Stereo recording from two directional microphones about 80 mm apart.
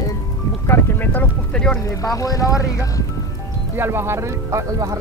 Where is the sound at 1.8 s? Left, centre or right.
Left.